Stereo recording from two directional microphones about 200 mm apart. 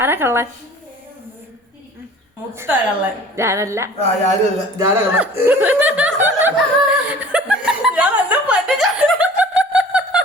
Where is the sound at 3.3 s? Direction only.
15° right (ahead or behind).